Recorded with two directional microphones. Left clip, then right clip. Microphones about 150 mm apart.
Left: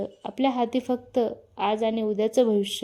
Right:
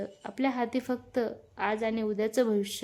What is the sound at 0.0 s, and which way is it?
A woman's voice, 15° left (ahead or behind).